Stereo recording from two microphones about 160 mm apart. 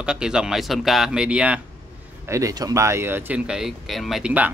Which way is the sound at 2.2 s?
20° right (ahead or behind).